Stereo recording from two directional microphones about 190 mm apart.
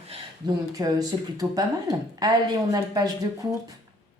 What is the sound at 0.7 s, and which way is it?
Speech, 20° right (ahead or behind).